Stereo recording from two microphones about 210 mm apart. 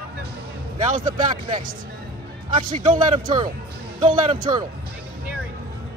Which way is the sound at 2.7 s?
35° right (ahead or behind).